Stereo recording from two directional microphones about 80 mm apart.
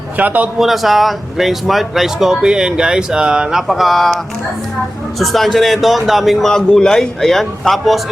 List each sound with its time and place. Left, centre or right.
0.2 s speech: centre
0.6 s speech: centre
3.7 s speech: centre
5.2 s speech: centre
6.5 s speech: centre